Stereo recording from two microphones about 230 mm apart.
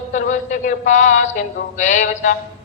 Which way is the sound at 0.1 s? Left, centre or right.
Left.